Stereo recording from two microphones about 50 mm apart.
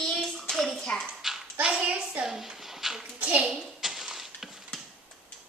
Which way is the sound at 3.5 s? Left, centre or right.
Centre.